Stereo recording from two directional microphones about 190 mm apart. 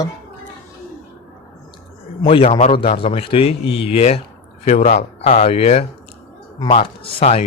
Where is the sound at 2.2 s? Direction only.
30° left (ahead or behind).